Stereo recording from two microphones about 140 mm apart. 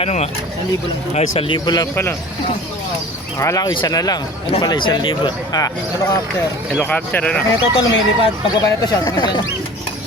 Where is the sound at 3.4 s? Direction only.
25° left (ahead or behind).